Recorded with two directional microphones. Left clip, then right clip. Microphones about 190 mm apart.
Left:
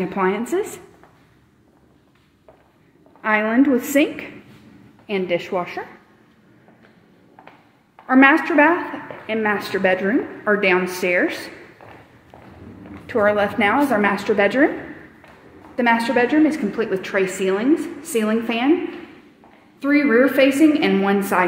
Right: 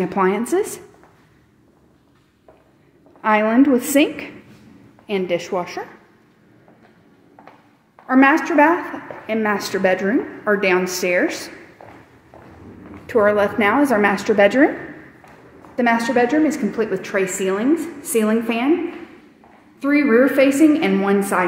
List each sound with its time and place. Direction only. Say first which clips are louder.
0.0 s a woman's voice: right 2 dB; 20° right (ahead or behind)
3.2 s a woman's voice: right 2 dB; 15° right (ahead or behind)
7.9 s a woman's voice: left 1 dB; centre (ahead or behind)
11.8 s walk: right 1 dB; centre (ahead or behind)
13.0 s a woman's voice: right 2 dB; 10° right (ahead or behind)
15.7 s a woman's voice: even; 10° right (ahead or behind)
19.8 s a woman's voice: right 1 dB; 15° right (ahead or behind)